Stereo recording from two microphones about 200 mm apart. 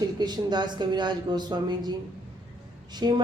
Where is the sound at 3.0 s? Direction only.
20° right (ahead or behind).